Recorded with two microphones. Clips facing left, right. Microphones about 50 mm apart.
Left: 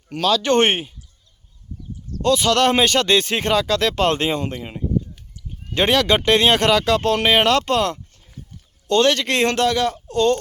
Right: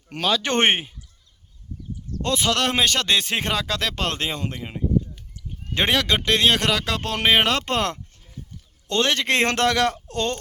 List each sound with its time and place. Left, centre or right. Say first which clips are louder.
0.1 s speech: left 5 dB; right
2.2 s speech: left 6 dB; right
2.5 s speech: left 4 dB; centre
4.1 s speech: left 6 dB; centre
6.1 s speech: left 4 dB; centre
7.6 s speech: left 4 dB; right
8.9 s speech: left 5 dB; centre
9.2 s speech: left 1 dB; right
9.5 s a man's voice: left 1 dB; right